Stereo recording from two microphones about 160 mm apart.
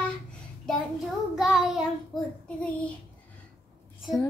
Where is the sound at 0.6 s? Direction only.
Centre (ahead or behind).